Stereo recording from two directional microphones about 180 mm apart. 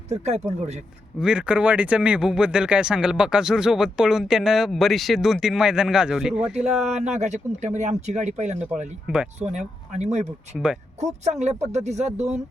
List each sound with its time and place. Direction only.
0.1 s speech: 40° right (ahead or behind)
1.2 s speech: 5° right (ahead or behind)
6.8 s speech: 40° right (ahead or behind)
9.0 s speech: 5° right (ahead or behind)
9.5 s speech: 40° right (ahead or behind)